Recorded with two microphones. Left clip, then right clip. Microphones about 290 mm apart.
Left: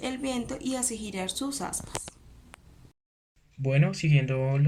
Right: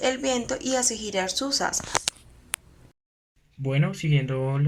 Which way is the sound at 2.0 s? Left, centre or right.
Right.